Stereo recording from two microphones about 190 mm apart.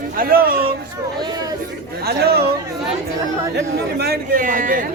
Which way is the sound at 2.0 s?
55° right (ahead or behind).